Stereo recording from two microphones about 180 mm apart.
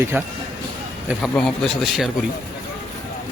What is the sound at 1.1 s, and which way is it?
Speech, centre (ahead or behind).